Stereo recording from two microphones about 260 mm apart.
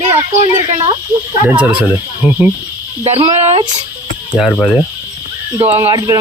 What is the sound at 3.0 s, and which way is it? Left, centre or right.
Speech, centre.